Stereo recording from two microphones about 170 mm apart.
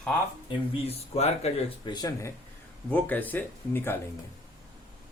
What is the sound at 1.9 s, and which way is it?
Speech, 20° left (ahead or behind).